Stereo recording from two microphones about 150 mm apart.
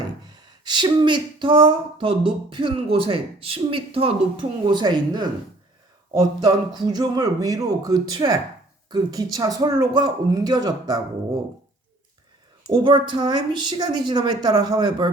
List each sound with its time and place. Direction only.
0.3 s a woman's voice: 25° right (ahead or behind)
12.7 s a woman's voice: 30° right (ahead or behind)